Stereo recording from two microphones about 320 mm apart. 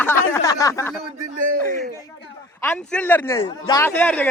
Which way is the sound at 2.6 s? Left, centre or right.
Centre.